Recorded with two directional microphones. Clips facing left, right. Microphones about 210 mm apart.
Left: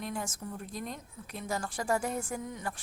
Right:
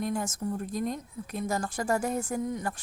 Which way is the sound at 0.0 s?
45° right (ahead or behind).